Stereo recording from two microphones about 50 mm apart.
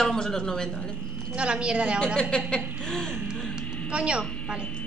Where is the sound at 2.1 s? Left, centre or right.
Left.